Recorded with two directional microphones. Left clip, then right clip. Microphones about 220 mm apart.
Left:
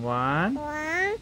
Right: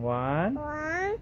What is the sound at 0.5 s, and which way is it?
Cat, 10° left (ahead or behind).